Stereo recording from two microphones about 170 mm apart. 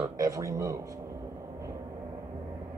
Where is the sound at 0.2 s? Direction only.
20° right (ahead or behind).